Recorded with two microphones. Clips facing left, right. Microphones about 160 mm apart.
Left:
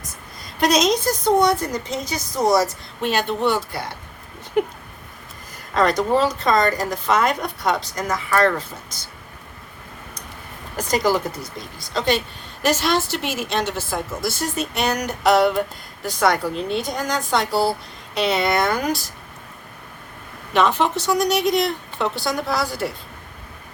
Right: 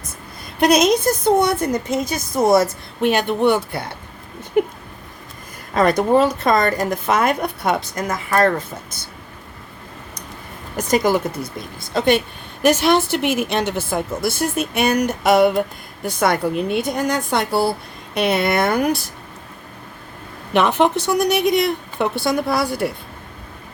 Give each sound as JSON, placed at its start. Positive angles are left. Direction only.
{"t": 0.6, "sound": "a woman's voice", "side_deg": -55}
{"t": 5.7, "sound": "speech", "side_deg": -55}
{"t": 11.0, "sound": "a woman's voice", "side_deg": -55}
{"t": 20.5, "sound": "a woman's voice", "side_deg": -60}